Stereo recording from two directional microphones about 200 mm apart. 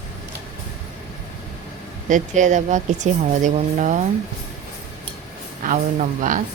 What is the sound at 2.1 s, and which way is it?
Speech, 40° right (ahead or behind).